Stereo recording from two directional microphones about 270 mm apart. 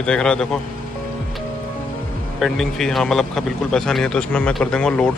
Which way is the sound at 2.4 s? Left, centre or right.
Centre.